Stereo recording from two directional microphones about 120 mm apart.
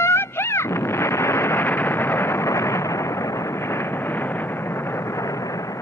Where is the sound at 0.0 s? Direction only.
20° left (ahead or behind).